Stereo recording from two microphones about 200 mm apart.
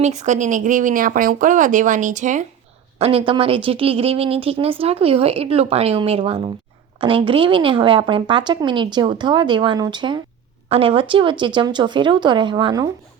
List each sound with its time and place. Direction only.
0.0 s speech: 35° right (ahead or behind)
3.0 s speech: 25° right (ahead or behind)